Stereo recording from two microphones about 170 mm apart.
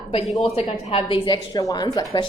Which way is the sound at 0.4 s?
35° left (ahead or behind).